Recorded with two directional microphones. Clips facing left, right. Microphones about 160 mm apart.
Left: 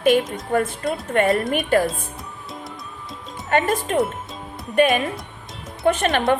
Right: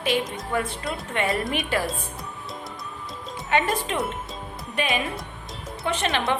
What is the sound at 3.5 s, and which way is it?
A woman's voice, 45° left (ahead or behind).